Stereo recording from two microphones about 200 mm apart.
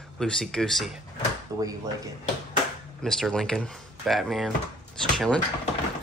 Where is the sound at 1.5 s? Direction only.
20° right (ahead or behind).